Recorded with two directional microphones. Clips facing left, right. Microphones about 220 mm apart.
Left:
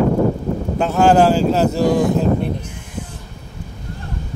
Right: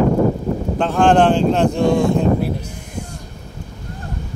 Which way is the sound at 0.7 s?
5° left (ahead or behind).